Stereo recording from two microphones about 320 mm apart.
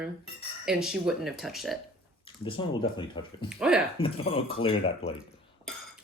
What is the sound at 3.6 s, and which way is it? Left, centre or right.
Speech, centre.